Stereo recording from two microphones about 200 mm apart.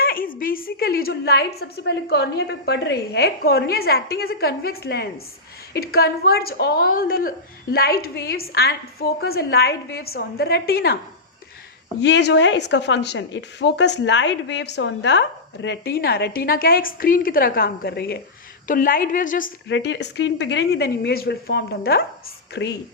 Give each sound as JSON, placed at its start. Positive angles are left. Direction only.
{"t": 0.0, "sound": "a sound", "side_deg": 45}
{"t": 0.3, "sound": "a woman's voice", "side_deg": 45}
{"t": 12.0, "sound": "a woman's voice", "side_deg": 60}
{"t": 18.7, "sound": "a woman's voice", "side_deg": 45}
{"t": 19.6, "sound": "a woman's voice", "side_deg": 65}